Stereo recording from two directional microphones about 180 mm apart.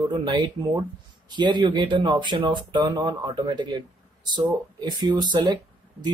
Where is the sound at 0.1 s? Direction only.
25° right (ahead or behind).